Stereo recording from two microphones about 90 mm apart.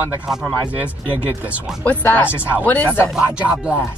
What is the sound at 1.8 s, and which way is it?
Speech, 15° left (ahead or behind).